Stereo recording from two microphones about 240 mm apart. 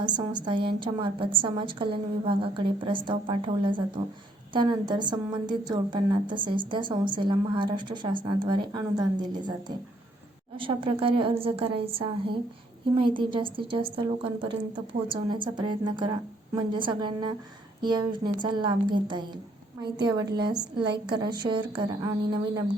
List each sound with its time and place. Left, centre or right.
0.0 s a woman's voice: centre